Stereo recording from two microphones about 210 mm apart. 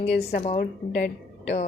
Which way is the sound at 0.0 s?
30° left (ahead or behind).